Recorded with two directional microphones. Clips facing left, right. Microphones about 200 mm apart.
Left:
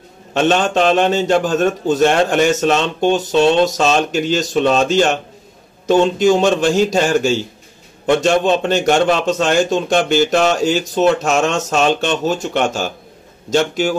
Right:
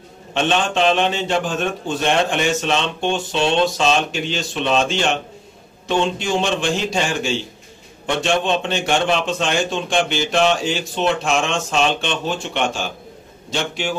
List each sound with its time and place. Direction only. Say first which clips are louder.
0.3 s a man's voice: left 5 dB; 40° left (ahead or behind)
6.1 s a man's voice: left 8 dB; 40° left (ahead or behind)